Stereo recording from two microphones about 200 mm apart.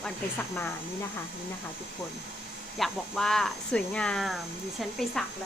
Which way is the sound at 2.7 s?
Centre (ahead or behind).